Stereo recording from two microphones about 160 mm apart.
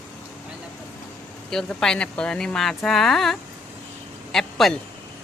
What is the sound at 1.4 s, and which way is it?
Speech, 5° left (ahead or behind).